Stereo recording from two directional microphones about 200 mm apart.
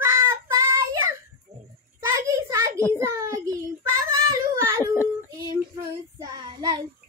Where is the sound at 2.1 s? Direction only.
15° right (ahead or behind).